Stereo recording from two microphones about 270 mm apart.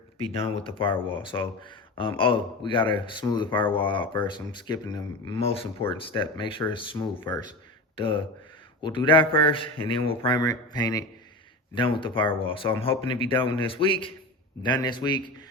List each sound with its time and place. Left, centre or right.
0.3 s speech: left